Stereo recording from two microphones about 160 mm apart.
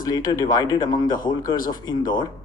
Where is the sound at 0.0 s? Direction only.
25° left (ahead or behind).